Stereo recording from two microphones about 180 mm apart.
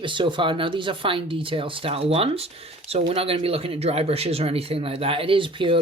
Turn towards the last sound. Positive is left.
turn(degrees=-30)  # may be behind; listen again after turning